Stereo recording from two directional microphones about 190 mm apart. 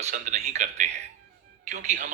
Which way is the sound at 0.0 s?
35° right (ahead or behind).